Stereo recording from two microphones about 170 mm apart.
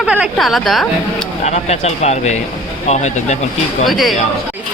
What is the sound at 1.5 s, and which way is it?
Speech, 40° left (ahead or behind).